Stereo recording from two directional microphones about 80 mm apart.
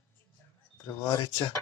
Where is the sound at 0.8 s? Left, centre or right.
Left.